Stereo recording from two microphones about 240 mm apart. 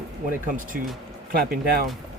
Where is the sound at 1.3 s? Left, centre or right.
Right.